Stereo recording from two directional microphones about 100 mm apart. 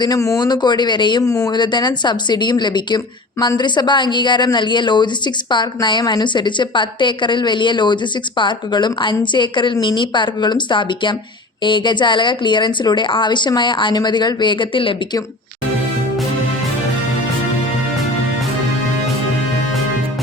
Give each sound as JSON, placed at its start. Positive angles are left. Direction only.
{"t": 0.0, "sound": "a woman's voice", "side_deg": 35}
{"t": 1.2, "sound": "speech", "side_deg": 35}
{"t": 1.5, "sound": "a woman's voice", "side_deg": 50}